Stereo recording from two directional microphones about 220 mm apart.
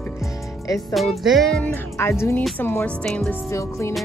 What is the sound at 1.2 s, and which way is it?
Speech, centre (ahead or behind).